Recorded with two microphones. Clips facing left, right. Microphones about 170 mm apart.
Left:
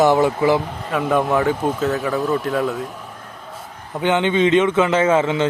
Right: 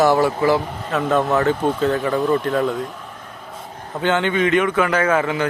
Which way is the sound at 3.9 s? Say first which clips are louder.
Left 2 dB; 15° left (ahead or behind).